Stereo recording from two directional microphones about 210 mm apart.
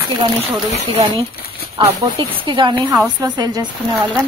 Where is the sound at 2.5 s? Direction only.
20° right (ahead or behind).